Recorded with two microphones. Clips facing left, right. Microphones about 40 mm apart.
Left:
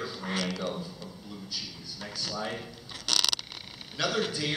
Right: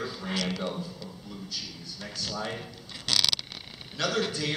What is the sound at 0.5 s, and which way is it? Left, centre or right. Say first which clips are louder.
Speech: right 1 dB; centre.